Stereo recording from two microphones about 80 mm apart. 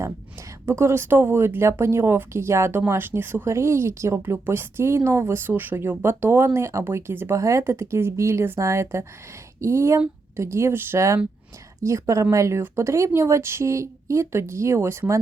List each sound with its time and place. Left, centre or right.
0.6 s speech: right
7.3 s speech: right